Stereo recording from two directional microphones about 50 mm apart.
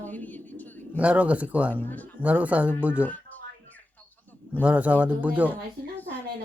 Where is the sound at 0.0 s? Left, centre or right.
Left.